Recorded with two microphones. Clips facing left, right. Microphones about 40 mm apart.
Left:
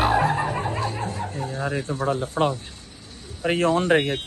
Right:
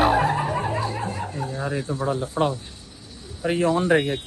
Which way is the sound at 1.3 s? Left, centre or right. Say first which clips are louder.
Even; left.